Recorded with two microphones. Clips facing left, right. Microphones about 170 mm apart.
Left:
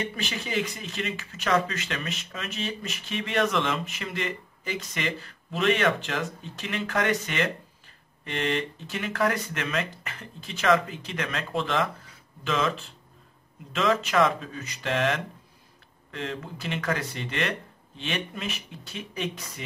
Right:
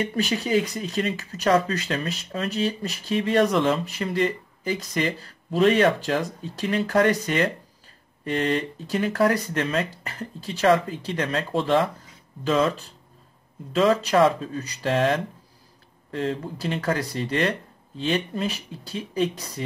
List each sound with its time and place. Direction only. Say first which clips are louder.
0.1 s speech: right 8 dB; 40° right (ahead or behind)